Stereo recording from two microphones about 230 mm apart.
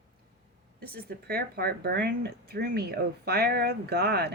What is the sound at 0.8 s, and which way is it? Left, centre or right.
Speech, right.